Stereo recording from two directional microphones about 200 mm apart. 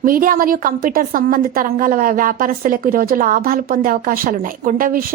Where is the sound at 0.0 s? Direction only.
45° right (ahead or behind).